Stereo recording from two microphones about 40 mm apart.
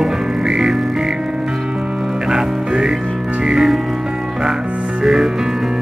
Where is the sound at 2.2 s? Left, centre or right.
Centre.